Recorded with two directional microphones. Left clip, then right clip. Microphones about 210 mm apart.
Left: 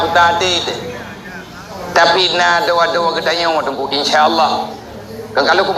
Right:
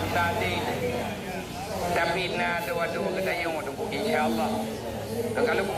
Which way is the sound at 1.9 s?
55° left (ahead or behind).